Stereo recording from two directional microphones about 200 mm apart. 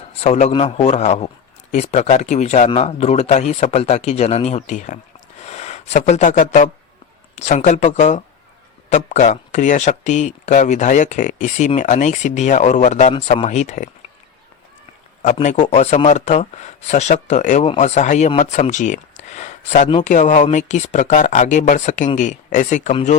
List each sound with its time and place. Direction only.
0.2 s speech: 35° left (ahead or behind)
5.4 s a sound: 35° left (ahead or behind)
7.3 s speech: 35° left (ahead or behind)
15.2 s speech: 35° left (ahead or behind)